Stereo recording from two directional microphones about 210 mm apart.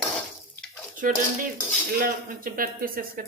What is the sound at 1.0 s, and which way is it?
Speech, 40° right (ahead or behind).